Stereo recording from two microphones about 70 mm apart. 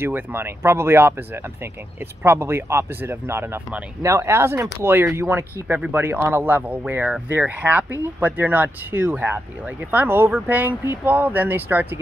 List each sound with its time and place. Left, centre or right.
0.0 s speech: right